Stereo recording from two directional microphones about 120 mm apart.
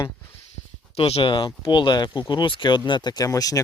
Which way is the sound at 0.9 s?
55° left (ahead or behind).